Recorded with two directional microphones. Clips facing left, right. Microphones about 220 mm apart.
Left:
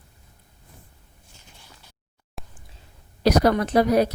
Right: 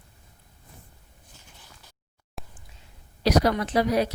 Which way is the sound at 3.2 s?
50° left (ahead or behind).